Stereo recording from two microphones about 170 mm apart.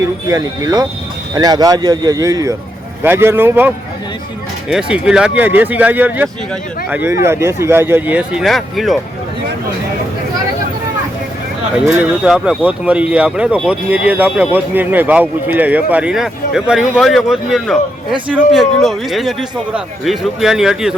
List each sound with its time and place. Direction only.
0.3 s speech: 20° right (ahead or behind)
4.7 s speech: 5° right (ahead or behind)
12.2 s a man's voice: 5° right (ahead or behind)